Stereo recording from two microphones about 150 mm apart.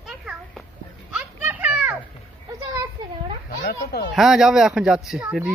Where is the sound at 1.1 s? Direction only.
10° right (ahead or behind).